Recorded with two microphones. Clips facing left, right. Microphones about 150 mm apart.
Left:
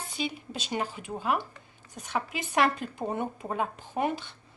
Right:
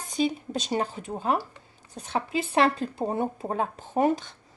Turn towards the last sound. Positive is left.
turn(degrees=-40)  # may be behind; listen again after turning